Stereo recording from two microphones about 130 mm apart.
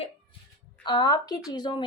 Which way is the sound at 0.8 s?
35° left (ahead or behind).